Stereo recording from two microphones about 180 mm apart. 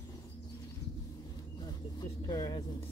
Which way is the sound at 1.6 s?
20° left (ahead or behind).